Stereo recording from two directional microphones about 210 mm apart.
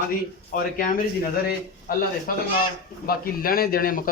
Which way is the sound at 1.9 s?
45° left (ahead or behind).